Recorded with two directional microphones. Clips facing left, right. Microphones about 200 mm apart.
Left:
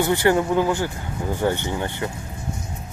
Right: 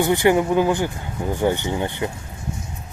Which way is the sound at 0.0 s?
15° right (ahead or behind).